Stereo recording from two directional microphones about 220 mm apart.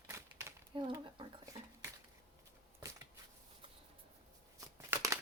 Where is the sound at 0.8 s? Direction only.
20° right (ahead or behind).